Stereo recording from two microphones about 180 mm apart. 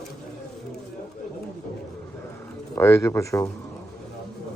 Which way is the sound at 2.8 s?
15° left (ahead or behind).